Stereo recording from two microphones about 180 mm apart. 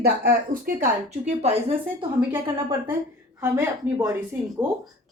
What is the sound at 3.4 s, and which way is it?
Speech, 15° right (ahead or behind).